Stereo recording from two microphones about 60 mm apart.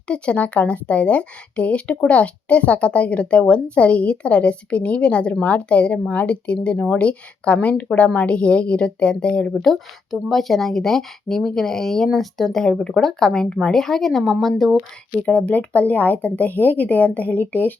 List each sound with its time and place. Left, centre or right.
0.1 s speech: left
9.6 s speech: centre
15.2 s speech: left